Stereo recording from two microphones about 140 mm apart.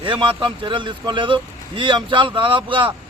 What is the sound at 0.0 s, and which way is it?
Speech, 35° right (ahead or behind).